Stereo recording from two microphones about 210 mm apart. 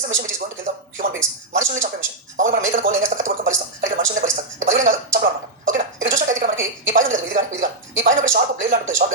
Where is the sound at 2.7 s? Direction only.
35° right (ahead or behind).